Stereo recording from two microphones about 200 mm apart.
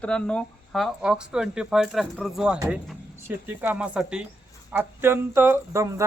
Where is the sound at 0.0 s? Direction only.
5° left (ahead or behind).